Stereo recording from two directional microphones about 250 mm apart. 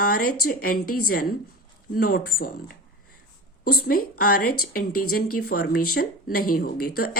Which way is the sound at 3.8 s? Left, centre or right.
Left.